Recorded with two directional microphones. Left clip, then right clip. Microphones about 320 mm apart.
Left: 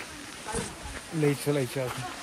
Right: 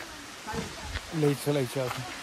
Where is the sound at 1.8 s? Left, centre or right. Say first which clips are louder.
Right 1 dB; centre.